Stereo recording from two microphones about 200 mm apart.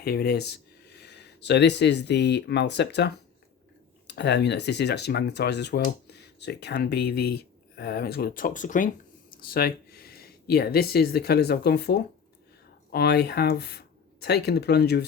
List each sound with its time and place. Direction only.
0.0 s speech: 50° left (ahead or behind)